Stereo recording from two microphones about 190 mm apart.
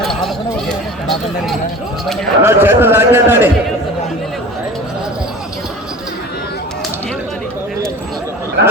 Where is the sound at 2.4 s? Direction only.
10° right (ahead or behind).